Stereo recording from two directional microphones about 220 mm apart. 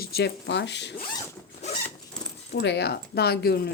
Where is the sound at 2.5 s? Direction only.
50° left (ahead or behind).